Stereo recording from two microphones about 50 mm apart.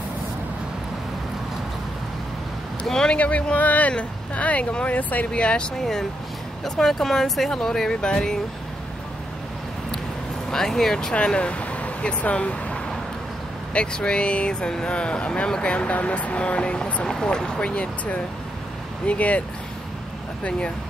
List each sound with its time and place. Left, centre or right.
2.9 s speech: centre
3.2 s speech: left
5.8 s speech: centre
10.5 s speech: centre
11.1 s speech: left
13.7 s speech: left
20.4 s speech: left